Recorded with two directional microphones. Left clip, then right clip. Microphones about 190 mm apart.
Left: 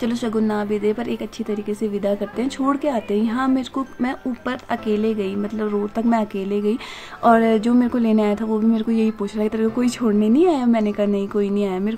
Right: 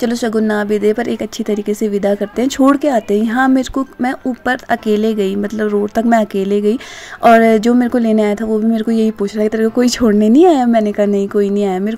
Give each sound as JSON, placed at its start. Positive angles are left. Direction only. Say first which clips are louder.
{"t": 0.0, "sound": "speech", "louder": "right 7 dB", "side_deg": -30}